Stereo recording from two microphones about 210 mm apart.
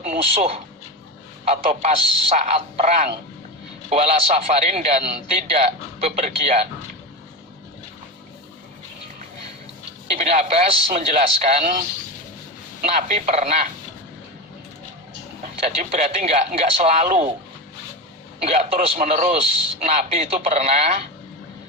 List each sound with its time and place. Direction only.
0.0 s a man's voice: 30° right (ahead or behind)
10.1 s a man's voice: 30° right (ahead or behind)
12.8 s a man's voice: 35° right (ahead or behind)
15.6 s a man's voice: 30° right (ahead or behind)
18.4 s a man's voice: 30° right (ahead or behind)